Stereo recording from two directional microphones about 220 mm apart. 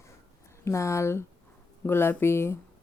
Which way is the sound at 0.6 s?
15° left (ahead or behind).